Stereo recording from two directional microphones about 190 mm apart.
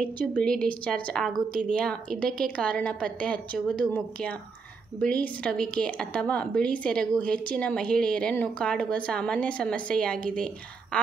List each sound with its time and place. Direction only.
0.0 s a woman's voice: 5° left (ahead or behind)